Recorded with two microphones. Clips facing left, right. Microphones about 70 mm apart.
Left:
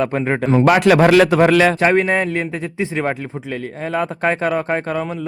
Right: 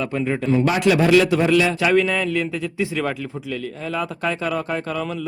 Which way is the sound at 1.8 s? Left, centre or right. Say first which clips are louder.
Left 3 dB; left.